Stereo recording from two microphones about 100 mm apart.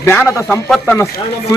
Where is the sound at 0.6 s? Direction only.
5° left (ahead or behind).